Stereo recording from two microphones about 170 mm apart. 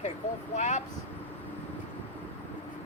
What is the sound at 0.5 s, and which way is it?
Speech, 45° left (ahead or behind).